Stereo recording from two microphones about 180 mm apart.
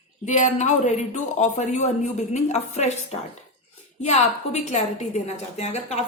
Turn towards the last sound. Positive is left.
turn(degrees=35)  # may be behind; listen again after turning